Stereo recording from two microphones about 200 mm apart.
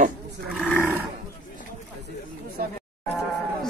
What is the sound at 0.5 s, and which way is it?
Roar, 10° left (ahead or behind).